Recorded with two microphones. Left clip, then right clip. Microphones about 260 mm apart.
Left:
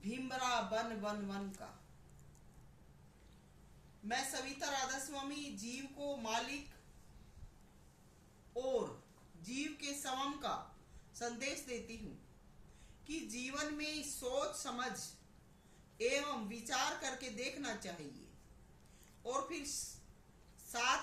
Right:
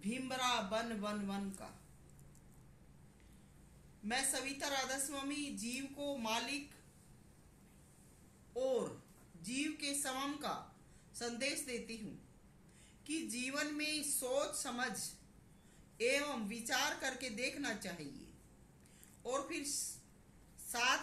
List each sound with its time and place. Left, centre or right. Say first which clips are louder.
0.0 s a man's voice: right 2 dB; centre
4.1 s a woman's voice: right 1 dB; centre
8.5 s a woman's voice: right 1 dB; centre
13.1 s a woman's voice: right 3 dB; centre
19.2 s a woman's voice: even; centre